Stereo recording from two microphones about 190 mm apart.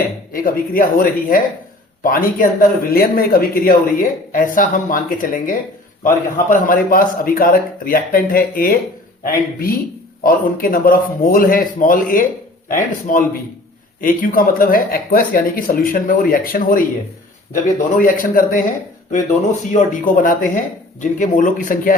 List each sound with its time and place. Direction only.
0.3 s speech: 50° left (ahead or behind)
10.2 s speech: 50° left (ahead or behind)